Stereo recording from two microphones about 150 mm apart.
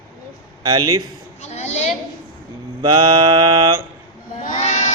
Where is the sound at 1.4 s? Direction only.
45° left (ahead or behind).